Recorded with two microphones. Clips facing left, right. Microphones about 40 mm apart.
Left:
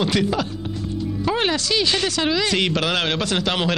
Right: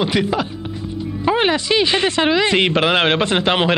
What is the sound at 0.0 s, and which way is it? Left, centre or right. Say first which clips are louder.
Speech: right 2 dB; centre.